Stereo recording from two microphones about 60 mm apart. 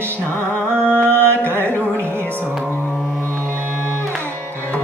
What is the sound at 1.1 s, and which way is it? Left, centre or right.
Music, left.